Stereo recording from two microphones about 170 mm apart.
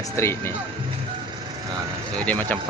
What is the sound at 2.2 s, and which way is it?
Speech, 10° left (ahead or behind).